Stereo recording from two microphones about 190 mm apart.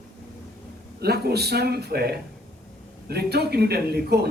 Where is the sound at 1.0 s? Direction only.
55° right (ahead or behind).